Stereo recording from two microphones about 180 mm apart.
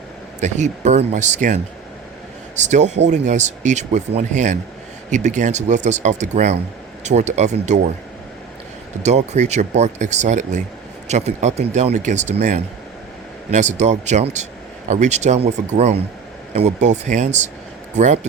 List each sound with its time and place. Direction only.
0.3 s speech: 40° right (ahead or behind)
9.0 s speech: 40° right (ahead or behind)